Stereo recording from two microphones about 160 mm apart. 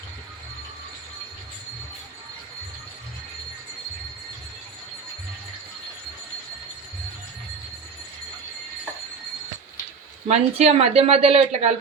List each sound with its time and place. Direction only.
10.2 s speech: 40° right (ahead or behind)